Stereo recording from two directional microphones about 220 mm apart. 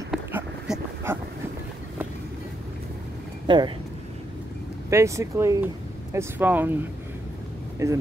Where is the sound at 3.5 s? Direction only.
20° right (ahead or behind).